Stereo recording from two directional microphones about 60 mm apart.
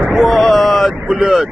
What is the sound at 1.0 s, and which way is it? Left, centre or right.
Speech, centre.